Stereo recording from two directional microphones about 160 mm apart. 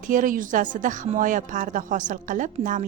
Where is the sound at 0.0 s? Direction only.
55° right (ahead or behind).